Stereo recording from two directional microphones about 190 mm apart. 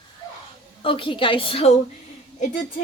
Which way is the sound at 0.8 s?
25° left (ahead or behind).